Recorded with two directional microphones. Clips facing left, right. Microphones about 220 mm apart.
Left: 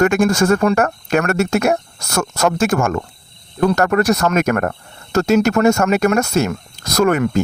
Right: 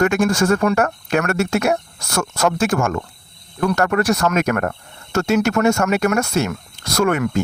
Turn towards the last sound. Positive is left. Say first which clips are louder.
# left 3 dB
turn(degrees=40)  # may be behind; listen again after turning